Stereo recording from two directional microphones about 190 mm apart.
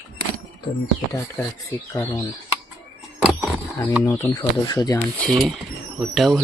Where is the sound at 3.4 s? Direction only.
10° right (ahead or behind).